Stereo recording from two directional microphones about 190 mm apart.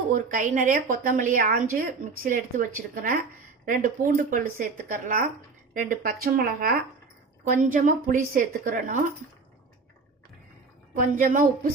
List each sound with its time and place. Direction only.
0.1 s speech: 45° right (ahead or behind)
10.9 s speech: 45° right (ahead or behind)